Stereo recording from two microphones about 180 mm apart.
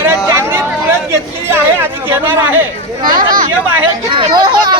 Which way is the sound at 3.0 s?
50° right (ahead or behind).